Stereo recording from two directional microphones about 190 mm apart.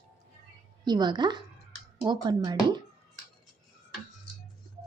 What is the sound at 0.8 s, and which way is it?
Speech, 20° right (ahead or behind).